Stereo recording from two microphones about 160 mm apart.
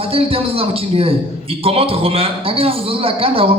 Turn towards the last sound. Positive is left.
turn(degrees=-35)  # may be behind; listen again after turning